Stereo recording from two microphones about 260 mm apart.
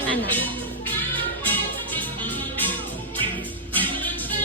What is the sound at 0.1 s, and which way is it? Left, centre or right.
Music, centre.